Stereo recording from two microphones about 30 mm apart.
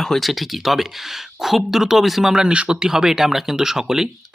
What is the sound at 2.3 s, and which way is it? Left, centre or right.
Speech, right.